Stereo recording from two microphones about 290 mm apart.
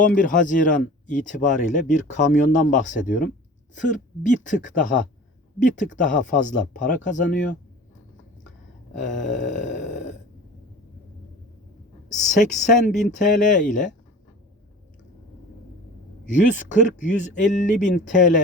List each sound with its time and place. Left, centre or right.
0.0 s speech: left
8.9 s speech: left
12.0 s speech: left
16.2 s speech: left